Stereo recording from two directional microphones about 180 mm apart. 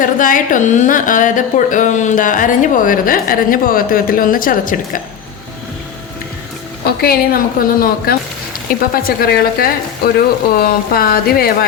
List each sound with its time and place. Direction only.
0.0 s a woman's voice: 50° left (ahead or behind)
6.8 s a woman's voice: 60° left (ahead or behind)